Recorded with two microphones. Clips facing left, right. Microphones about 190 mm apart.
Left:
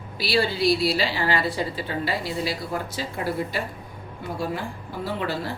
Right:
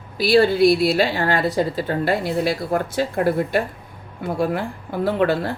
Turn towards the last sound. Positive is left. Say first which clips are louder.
# right 8 dB
turn(degrees=-55)  # may be behind; listen again after turning